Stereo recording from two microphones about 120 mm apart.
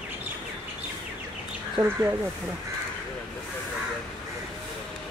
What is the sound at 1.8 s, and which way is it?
Speech, 20° right (ahead or behind).